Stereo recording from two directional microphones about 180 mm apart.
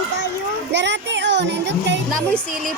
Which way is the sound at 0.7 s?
80° right.